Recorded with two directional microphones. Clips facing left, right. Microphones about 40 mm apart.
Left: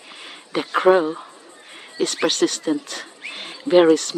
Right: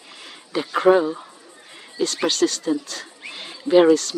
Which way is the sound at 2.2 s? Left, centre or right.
Left.